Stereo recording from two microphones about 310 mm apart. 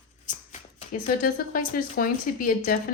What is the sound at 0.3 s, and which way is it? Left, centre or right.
Speech, left.